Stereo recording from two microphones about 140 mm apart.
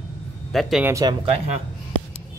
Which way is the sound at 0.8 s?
25° right (ahead or behind).